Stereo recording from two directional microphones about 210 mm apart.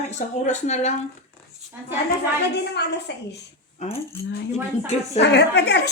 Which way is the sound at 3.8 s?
30° left (ahead or behind).